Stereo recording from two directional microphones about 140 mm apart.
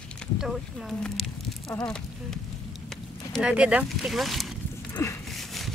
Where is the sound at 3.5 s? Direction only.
10° right (ahead or behind).